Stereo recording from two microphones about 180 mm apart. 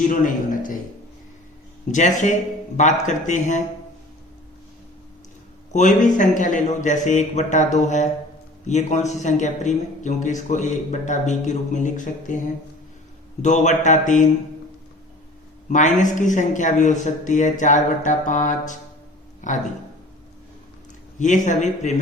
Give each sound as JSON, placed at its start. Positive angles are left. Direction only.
{"t": 0.1, "sound": "a man's voice", "side_deg": 45}
{"t": 1.9, "sound": "a man's voice", "side_deg": 40}
{"t": 5.7, "sound": "a man's voice", "side_deg": 45}
{"t": 13.4, "sound": "a man's voice", "side_deg": 40}
{"t": 15.7, "sound": "a man's voice", "side_deg": 45}
{"t": 21.2, "sound": "a man's voice", "side_deg": 45}